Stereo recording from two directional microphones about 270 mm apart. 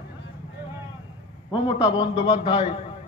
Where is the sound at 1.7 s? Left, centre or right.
Centre.